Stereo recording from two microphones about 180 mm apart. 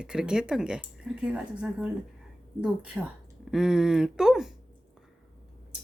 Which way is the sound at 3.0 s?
5° right (ahead or behind).